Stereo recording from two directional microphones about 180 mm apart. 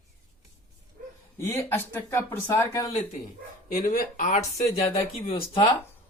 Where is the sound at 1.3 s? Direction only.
15° left (ahead or behind).